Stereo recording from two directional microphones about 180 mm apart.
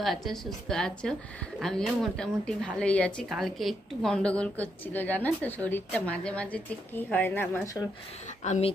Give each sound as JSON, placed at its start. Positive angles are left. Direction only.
{"t": 0.0, "sound": "speech", "side_deg": 0}
{"t": 8.4, "sound": "speech", "side_deg": 40}